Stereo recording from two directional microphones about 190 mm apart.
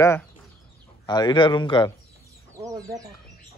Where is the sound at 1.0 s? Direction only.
20° left (ahead or behind).